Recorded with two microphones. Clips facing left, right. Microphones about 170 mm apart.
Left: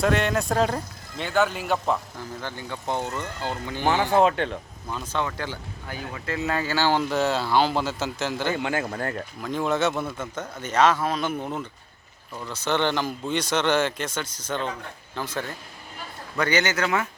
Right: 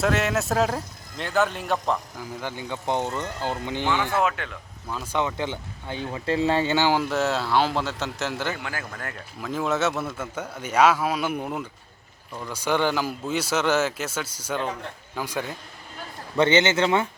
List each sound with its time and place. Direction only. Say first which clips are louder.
0.0 s a man's voice: left 1 dB; 5° right (ahead or behind)
2.1 s a man's voice: right 1 dB; 15° right (ahead or behind)
4.1 s speech: left 5 dB; 30° left (ahead or behind)
5.1 s speech: right 3 dB; 20° right (ahead or behind)
6.9 s a man's voice: even; 5° right (ahead or behind)
8.5 s a man's voice: left 8 dB; 25° left (ahead or behind)
9.4 s a man's voice: even; centre (ahead or behind)
16.4 s speech: right 4 dB; 25° right (ahead or behind)